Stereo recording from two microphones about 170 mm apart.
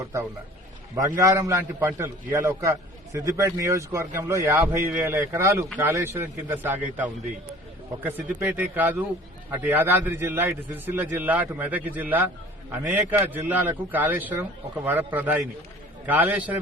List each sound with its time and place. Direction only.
0.0 s a man's voice: 15° right (ahead or behind)